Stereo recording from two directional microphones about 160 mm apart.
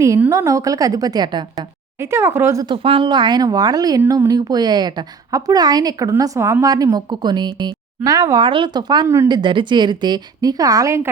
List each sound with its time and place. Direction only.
0.0 s speech: 20° right (ahead or behind)
2.6 s speech: 35° right (ahead or behind); by 11.1 s 20° right (ahead or behind)